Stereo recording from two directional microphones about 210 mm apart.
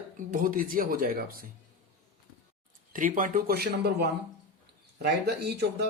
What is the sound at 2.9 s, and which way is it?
Speech, 40° right (ahead or behind).